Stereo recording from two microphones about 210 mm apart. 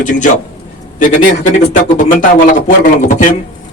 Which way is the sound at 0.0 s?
35° left (ahead or behind).